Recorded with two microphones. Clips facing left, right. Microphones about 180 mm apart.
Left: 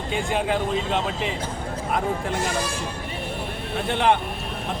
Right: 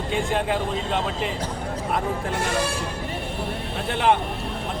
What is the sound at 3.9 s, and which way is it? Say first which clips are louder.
Speech: even; centre (ahead or behind).